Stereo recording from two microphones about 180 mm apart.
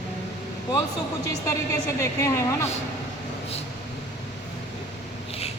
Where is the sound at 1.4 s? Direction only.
15° left (ahead or behind).